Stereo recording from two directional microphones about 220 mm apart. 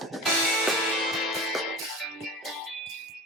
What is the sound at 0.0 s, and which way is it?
Music, centre (ahead or behind).